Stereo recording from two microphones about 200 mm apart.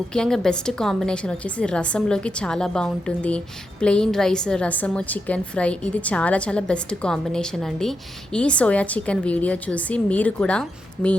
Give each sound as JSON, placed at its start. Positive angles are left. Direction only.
{"t": 0.1, "sound": "a woman's voice", "side_deg": 5}